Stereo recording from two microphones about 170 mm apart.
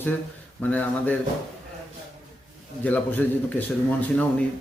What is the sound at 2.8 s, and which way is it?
Speech, 10° left (ahead or behind).